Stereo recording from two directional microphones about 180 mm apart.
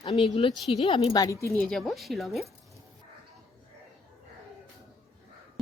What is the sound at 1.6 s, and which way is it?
Speech, centre (ahead or behind).